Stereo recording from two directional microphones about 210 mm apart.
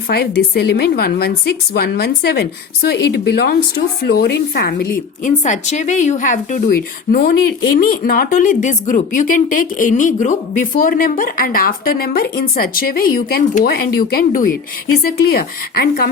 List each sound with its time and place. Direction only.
0.1 s a woman's voice: 50° left (ahead or behind)